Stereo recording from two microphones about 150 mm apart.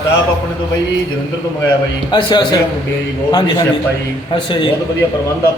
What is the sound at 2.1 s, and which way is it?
Speech, 30° left (ahead or behind).